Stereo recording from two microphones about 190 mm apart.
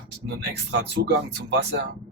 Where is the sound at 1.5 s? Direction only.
65° right (ahead or behind).